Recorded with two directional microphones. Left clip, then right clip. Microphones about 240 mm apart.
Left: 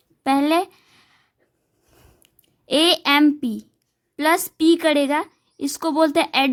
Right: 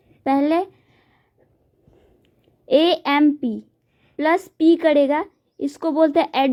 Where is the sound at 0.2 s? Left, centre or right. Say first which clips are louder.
Even; left.